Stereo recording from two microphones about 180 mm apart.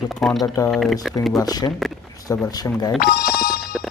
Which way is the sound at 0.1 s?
Centre (ahead or behind).